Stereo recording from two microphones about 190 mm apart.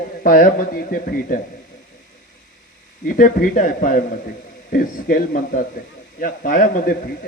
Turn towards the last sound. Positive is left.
turn(degrees=50)  # may be behind; listen again after turning